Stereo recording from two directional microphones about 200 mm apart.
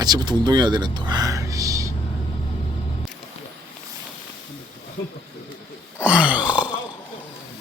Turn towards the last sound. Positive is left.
turn(degrees=-5)  # may be behind; listen again after turning